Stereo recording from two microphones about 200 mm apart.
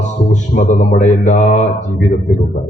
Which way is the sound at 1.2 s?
35° left (ahead or behind).